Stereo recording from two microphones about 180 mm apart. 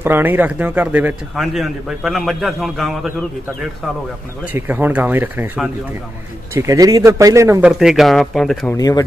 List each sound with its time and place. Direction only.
0.0 s speech: 10° right (ahead or behind)
4.6 s speech: 10° right (ahead or behind)
7.8 s speech: centre (ahead or behind)
8.7 s speech: 20° left (ahead or behind)